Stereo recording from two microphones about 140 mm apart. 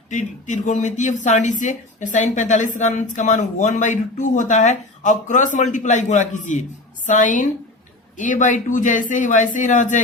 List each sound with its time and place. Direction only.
0.1 s a woman's voice: 60° left (ahead or behind)